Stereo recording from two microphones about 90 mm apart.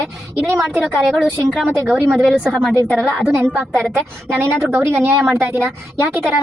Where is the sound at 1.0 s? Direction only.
5° right (ahead or behind).